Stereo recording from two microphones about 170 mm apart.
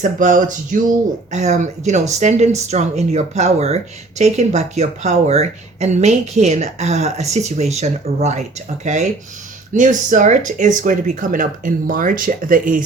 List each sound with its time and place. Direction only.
0.0 s speech: 50° right (ahead or behind)